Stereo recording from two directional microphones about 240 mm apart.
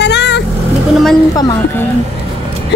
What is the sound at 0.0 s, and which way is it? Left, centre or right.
Vehicle, left.